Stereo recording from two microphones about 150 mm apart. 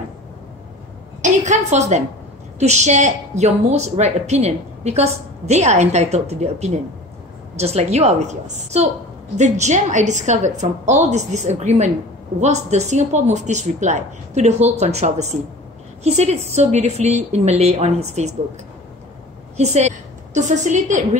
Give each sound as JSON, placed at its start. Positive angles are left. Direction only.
{"t": 1.2, "sound": "a woman's voice", "side_deg": -50}
{"t": 19.5, "sound": "a woman's voice", "side_deg": -45}